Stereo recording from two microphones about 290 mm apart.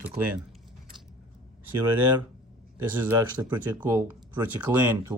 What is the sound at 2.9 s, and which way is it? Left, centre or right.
Speech, centre.